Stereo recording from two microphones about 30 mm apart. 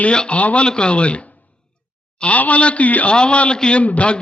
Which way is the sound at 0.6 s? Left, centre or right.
Left.